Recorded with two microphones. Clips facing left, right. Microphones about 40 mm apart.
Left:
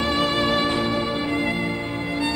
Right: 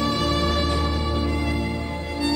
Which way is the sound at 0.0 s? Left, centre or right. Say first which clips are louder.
Left 1 dB; left.